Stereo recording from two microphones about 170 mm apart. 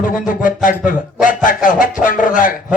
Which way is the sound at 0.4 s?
50° left (ahead or behind).